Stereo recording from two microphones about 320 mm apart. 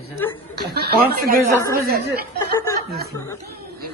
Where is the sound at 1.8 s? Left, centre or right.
Right.